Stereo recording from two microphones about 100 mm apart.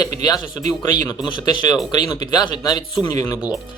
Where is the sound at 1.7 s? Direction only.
45° left (ahead or behind).